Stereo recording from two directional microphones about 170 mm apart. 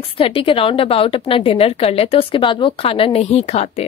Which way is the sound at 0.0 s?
35° left (ahead or behind).